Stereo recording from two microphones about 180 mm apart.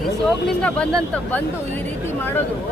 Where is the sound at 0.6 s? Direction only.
5° left (ahead or behind).